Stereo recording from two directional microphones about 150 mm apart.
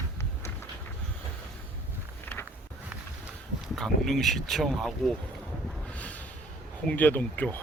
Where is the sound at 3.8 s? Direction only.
Centre (ahead or behind).